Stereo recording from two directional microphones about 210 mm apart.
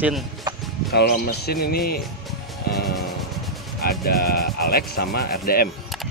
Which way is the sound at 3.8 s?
45° left (ahead or behind).